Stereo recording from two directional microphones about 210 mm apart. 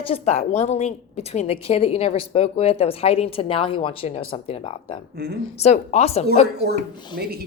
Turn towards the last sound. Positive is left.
turn(degrees=-50)  # may be behind; listen again after turning